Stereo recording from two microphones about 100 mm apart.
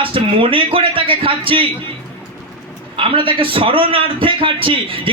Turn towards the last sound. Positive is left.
turn(degrees=-65)  # may be behind; listen again after turning